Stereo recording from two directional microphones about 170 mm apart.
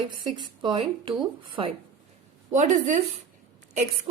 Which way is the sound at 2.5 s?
45° right (ahead or behind).